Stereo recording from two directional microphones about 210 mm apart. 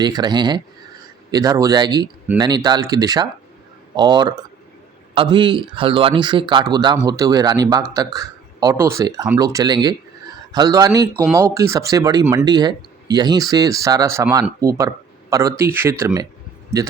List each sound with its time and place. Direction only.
0.0 s speech: 20° right (ahead or behind)